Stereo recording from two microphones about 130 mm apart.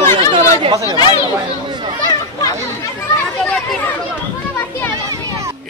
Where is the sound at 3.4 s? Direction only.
5° left (ahead or behind).